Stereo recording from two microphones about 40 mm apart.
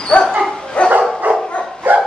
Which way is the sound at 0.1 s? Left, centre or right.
Left.